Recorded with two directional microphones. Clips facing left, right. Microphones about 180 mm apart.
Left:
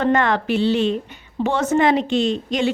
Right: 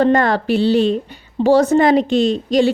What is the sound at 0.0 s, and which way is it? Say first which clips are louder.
A woman's voice: right 4 dB; 35° right (ahead or behind).